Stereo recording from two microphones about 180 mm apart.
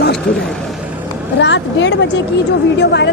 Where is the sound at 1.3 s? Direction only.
80° left.